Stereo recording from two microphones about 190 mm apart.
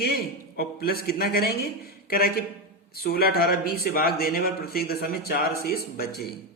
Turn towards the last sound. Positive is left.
turn(degrees=55)  # may be behind; listen again after turning